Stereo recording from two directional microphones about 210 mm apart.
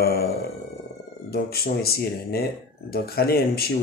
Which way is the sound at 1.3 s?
50° left (ahead or behind).